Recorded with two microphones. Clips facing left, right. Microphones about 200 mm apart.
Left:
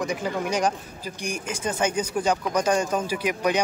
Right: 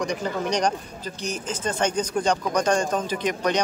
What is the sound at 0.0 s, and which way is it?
Speech, 5° left (ahead or behind).